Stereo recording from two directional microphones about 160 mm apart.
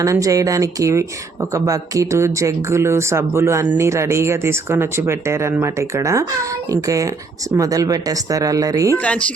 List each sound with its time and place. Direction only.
0.0 s speech: 20° right (ahead or behind)
9.0 s speech: 10° left (ahead or behind)